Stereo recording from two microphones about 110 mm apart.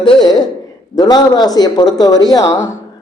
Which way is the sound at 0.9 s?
35° left (ahead or behind).